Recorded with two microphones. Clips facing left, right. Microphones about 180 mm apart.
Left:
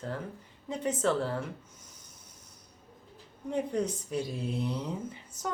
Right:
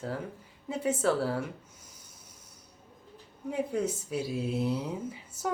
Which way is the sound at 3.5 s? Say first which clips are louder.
Even; 5° right (ahead or behind).